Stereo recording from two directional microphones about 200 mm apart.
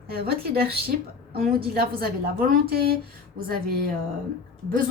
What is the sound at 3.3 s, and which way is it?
Speech, 45° right (ahead or behind).